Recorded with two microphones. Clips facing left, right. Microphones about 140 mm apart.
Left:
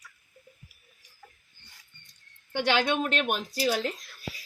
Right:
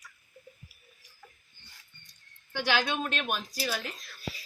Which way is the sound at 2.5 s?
60° left (ahead or behind).